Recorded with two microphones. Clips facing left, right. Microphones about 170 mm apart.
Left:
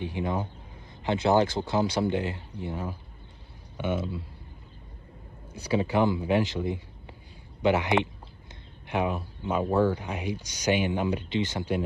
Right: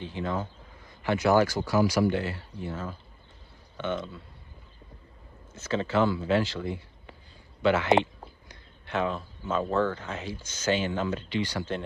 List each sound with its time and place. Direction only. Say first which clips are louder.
0.0 s speech: left 2 dB; 15° left (ahead or behind)
5.5 s speech: left 2 dB; 10° left (ahead or behind)